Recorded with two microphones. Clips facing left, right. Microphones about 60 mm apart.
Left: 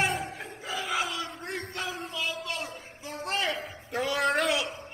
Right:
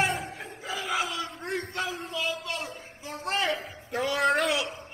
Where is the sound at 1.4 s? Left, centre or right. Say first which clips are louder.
Right 3 dB; centre.